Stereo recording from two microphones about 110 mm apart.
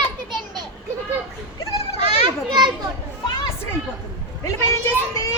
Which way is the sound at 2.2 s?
45° right (ahead or behind).